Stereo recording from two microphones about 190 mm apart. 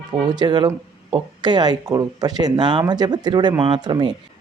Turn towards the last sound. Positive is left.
turn(degrees=-25)  # may be behind; listen again after turning